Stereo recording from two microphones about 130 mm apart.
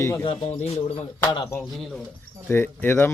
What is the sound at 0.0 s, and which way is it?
Speech, 25° left (ahead or behind).